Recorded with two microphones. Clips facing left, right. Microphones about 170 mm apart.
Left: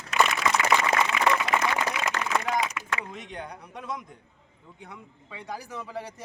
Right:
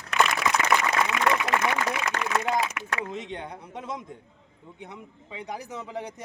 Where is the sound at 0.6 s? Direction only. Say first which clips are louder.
Left 1 dB; 45° right (ahead or behind).